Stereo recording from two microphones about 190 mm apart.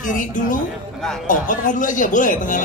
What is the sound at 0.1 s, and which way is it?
Speech, 45° left (ahead or behind).